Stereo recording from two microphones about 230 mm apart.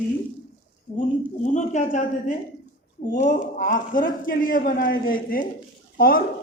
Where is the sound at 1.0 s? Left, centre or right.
Left.